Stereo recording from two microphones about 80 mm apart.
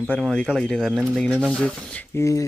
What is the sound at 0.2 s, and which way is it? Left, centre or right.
Speech, centre.